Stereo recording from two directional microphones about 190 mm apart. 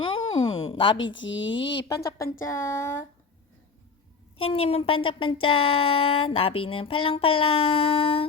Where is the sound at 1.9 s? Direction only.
15° left (ahead or behind).